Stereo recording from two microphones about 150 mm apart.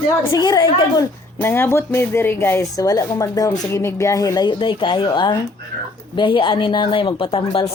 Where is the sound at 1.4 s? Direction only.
15° left (ahead or behind).